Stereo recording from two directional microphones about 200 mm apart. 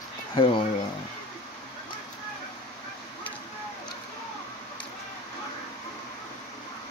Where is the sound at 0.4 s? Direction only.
25° left (ahead or behind).